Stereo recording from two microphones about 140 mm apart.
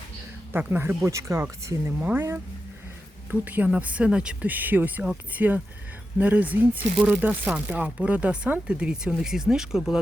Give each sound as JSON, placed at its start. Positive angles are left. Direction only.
{"t": 0.5, "sound": "speech", "side_deg": -15}